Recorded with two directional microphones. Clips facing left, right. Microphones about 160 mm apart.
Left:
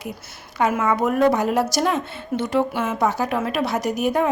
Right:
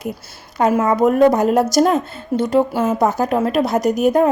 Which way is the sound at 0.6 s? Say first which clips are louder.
Right 5 dB; 35° right (ahead or behind).